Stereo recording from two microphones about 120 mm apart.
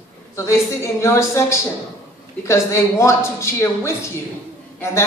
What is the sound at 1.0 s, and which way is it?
Speech, 25° left (ahead or behind).